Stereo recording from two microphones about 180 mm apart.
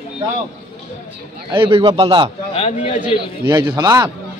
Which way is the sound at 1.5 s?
30° right (ahead or behind).